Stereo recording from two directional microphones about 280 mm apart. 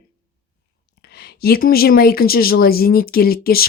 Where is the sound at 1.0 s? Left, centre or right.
Left.